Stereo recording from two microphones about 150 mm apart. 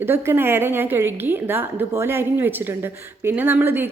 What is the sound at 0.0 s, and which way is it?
A woman's voice, 15° right (ahead or behind).